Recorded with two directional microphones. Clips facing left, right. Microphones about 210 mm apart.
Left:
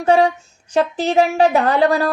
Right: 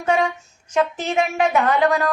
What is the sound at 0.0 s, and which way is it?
Speech, 35° left (ahead or behind).